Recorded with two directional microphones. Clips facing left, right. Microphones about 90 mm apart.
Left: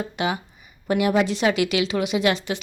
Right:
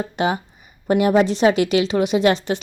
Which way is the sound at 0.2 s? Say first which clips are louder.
Right 5 dB; 35° right (ahead or behind).